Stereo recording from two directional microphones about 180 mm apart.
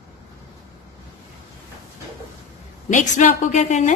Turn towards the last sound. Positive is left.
turn(degrees=40)  # may be behind; listen again after turning